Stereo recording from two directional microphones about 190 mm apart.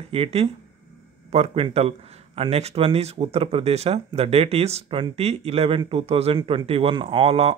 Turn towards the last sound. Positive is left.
turn(degrees=-30)  # may be behind; listen again after turning